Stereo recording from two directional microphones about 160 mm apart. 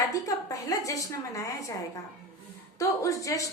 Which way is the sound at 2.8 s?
20° left (ahead or behind).